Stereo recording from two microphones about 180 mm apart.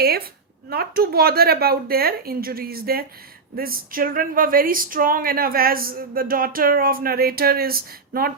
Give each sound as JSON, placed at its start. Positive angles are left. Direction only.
{"t": 0.0, "sound": "speech", "side_deg": -60}